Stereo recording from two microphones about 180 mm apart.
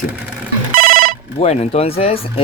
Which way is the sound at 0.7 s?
55° right (ahead or behind).